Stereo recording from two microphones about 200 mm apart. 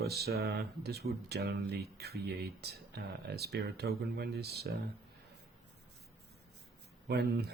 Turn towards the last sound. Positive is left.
turn(degrees=-55)  # may be behind; listen again after turning